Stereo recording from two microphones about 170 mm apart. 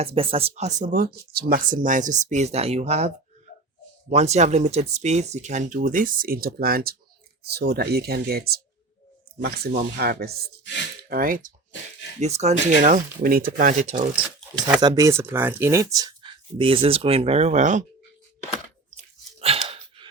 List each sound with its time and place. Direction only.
0.0 s speech: 35° right (ahead or behind)
0.9 s speech: 60° right (ahead or behind); by 3.1 s 40° right (ahead or behind)
4.1 s speech: 40° right (ahead or behind); by 11.5 s 55° right (ahead or behind)
12.2 s speech: 40° right (ahead or behind)
14.8 s speech: 25° right (ahead or behind); by 17.8 s 45° right (ahead or behind)
19.4 s gasp: 35° right (ahead or behind)